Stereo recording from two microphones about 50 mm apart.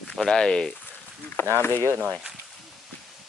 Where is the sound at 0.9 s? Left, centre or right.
Left.